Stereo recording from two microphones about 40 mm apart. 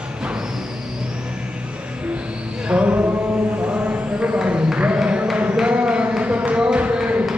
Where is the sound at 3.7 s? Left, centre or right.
Right.